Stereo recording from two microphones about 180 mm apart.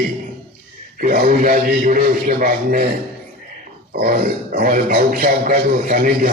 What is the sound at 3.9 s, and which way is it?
A man's voice, 50° right (ahead or behind).